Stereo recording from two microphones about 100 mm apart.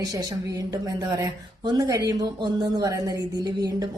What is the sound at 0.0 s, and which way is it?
Speech, 40° right (ahead or behind).